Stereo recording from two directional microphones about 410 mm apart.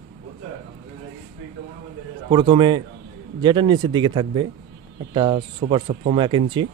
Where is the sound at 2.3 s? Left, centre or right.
Centre.